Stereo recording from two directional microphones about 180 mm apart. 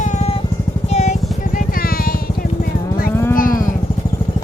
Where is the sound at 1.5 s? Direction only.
55° left (ahead or behind).